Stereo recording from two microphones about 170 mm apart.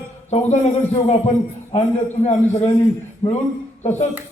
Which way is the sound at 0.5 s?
40° left (ahead or behind).